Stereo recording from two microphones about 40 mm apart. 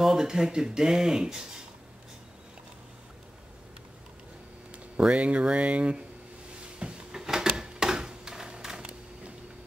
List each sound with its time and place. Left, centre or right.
0.0 s speech: centre
4.9 s speech: right
6.8 s a sound: centre